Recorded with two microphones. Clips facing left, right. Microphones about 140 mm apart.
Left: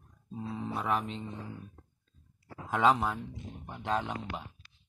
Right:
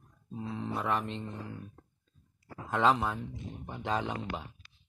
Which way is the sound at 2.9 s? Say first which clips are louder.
Left 1 dB; 5° left (ahead or behind).